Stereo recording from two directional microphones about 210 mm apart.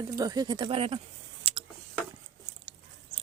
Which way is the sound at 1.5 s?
25° right (ahead or behind).